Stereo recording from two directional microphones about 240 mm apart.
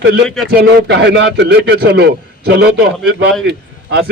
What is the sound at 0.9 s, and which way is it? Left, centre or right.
Speech, right.